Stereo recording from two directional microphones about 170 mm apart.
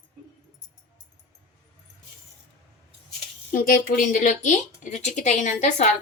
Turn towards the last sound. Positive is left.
turn(degrees=45)  # may be behind; listen again after turning